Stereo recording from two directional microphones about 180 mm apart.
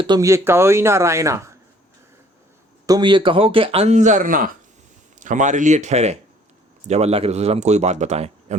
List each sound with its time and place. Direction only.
0.0 s speech: 20° right (ahead or behind)
2.8 s speech: 25° right (ahead or behind); by 8.5 s 40° right (ahead or behind)